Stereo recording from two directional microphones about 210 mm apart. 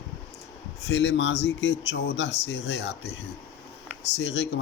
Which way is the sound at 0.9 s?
55° left (ahead or behind).